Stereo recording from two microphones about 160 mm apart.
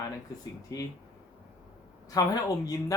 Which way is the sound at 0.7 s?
20° left (ahead or behind).